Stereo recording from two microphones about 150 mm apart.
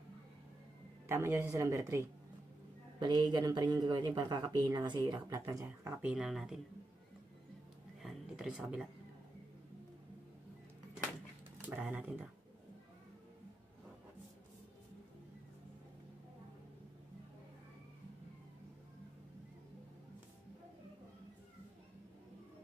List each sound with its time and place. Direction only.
1.0 s speech: 15° right (ahead or behind)
3.0 s speech: 30° right (ahead or behind)
6.0 s speech: 5° right (ahead or behind)
8.0 s a sound: 5° right (ahead or behind)
11.6 s speech: 10° right (ahead or behind)